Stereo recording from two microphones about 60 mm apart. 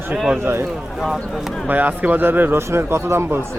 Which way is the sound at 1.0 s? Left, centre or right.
Centre.